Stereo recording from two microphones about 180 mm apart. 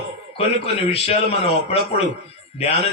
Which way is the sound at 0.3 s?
30° left (ahead or behind).